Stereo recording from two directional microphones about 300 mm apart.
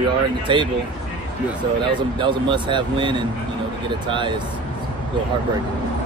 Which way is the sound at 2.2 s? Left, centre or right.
Centre.